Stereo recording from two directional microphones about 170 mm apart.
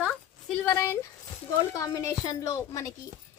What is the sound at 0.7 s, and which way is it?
A woman's voice, 15° left (ahead or behind).